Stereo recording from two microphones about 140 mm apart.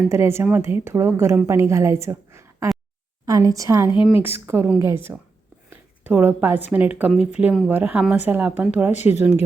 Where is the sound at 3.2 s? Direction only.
25° right (ahead or behind).